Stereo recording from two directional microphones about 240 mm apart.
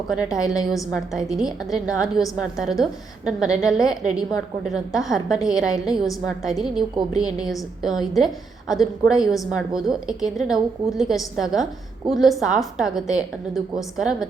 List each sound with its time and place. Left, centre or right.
0.1 s a woman's voice: centre